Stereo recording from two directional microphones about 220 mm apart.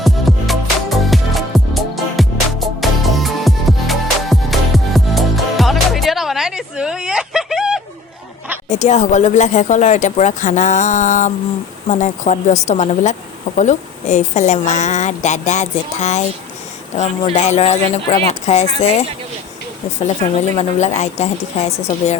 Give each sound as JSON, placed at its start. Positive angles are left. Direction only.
{"t": 0.0, "sound": "music", "side_deg": 0}
{"t": 8.7, "sound": "a woman's voice", "side_deg": 30}
{"t": 20.6, "sound": "a woman's voice", "side_deg": 30}